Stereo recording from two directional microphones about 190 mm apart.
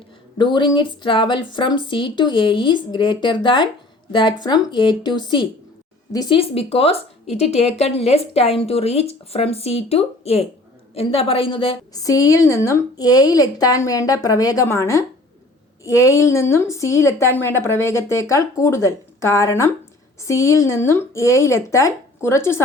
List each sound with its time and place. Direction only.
0.3 s a woman's voice: 25° left (ahead or behind)